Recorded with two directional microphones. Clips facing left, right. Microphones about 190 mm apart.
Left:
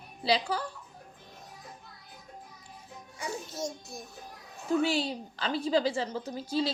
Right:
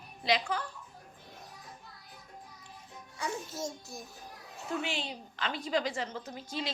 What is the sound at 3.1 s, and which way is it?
Speech, 15° left (ahead or behind).